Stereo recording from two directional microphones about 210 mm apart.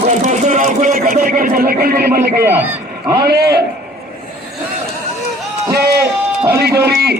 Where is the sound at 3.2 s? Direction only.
50° right (ahead or behind).